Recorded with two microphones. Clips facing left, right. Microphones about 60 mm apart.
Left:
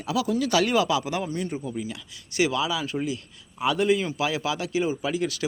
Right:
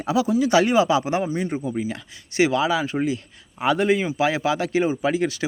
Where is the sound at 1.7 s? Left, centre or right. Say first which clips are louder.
Right 5 dB; right.